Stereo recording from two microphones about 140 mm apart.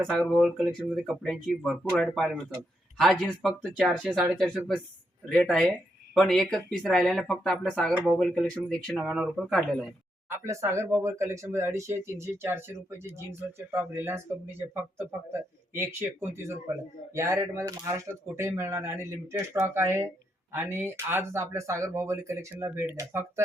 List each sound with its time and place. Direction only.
0.1 s speech: 5° left (ahead or behind)
10.4 s speech: 20° right (ahead or behind)